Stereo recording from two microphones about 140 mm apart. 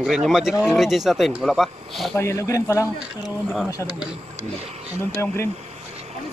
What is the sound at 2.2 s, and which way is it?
Speech, 20° left (ahead or behind).